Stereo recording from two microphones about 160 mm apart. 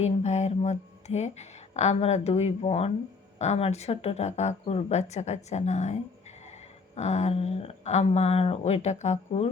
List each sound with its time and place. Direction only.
0.0 s speech: 45° left (ahead or behind)